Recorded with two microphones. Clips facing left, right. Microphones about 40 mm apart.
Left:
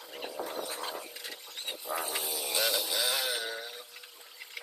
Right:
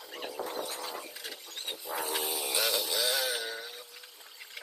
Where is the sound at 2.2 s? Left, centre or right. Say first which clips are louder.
Right 2 dB; right.